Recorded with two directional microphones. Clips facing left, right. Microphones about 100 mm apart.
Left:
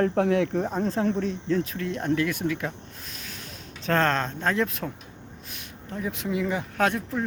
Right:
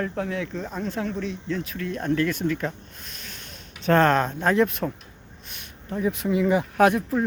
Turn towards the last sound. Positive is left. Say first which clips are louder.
# right 6 dB
turn(degrees=-5)  # may be behind; listen again after turning